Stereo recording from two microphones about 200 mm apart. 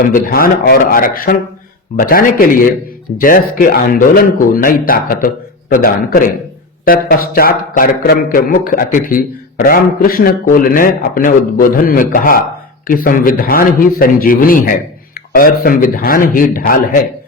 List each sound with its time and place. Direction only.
0.1 s a man's voice: 45° left (ahead or behind)